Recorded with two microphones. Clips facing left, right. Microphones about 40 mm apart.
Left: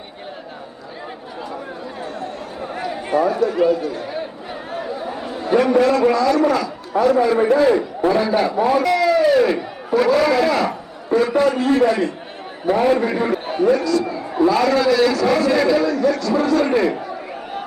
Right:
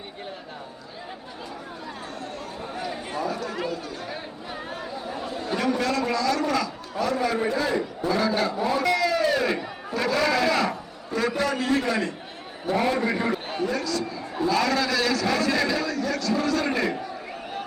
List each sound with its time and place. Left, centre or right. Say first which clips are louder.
3.2 s a man's voice: left 12 dB; centre
5.0 s chatter: left 5 dB; left
5.4 s a sound: left 10 dB; centre
5.8 s a man's voice: left 9 dB; centre
6.9 s a man's voice: left 10 dB; left
8.1 s a man's voice: left 5 dB; left
8.8 s a sound: left 4 dB; centre
9.9 s a man's voice: left 8 dB; centre
11.1 s a man's voice: left 9 dB; left
13.1 s a sound: left 5 dB; centre
13.7 s a man's voice: left 9 dB; centre